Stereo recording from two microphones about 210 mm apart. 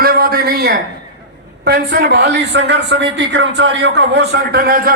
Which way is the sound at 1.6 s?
50° right (ahead or behind).